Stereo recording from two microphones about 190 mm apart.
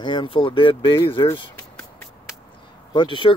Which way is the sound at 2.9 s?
25° left (ahead or behind).